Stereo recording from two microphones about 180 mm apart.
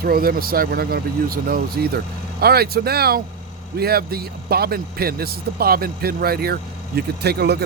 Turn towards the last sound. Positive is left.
turn(degrees=-65)  # may be behind; listen again after turning